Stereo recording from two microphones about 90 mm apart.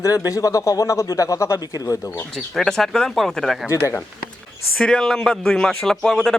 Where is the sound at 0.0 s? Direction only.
40° left (ahead or behind).